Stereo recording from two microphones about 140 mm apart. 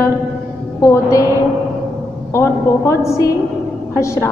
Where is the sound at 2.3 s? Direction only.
20° left (ahead or behind).